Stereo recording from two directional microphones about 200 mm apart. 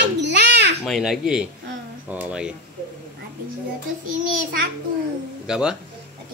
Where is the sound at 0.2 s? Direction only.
60° right (ahead or behind).